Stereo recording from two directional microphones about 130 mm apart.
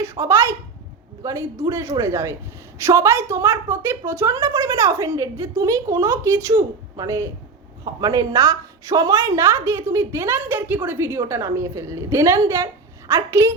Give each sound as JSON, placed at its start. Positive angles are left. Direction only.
{"t": 0.0, "sound": "a woman's voice", "side_deg": -20}